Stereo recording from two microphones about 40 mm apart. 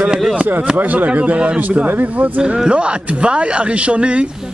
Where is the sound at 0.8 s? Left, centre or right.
Right.